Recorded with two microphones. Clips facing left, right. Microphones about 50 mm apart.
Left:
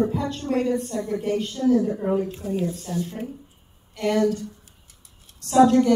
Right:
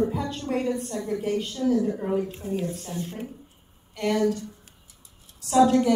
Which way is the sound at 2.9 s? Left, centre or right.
Right.